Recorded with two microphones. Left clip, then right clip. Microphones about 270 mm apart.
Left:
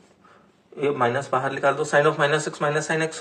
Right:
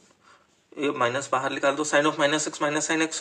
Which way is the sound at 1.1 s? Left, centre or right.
Right.